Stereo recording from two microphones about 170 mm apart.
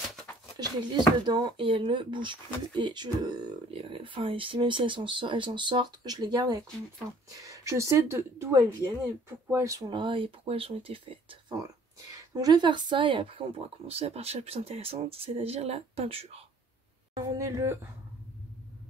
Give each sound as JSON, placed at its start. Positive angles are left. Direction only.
{"t": 0.0, "sound": "a sound", "side_deg": 0}
{"t": 0.6, "sound": "speech", "side_deg": -25}
{"t": 17.3, "sound": "speech", "side_deg": -20}